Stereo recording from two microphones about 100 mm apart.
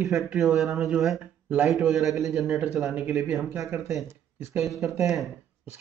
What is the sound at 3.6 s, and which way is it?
Speech, 25° right (ahead or behind).